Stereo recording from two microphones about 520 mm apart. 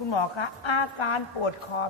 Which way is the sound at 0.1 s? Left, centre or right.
Left.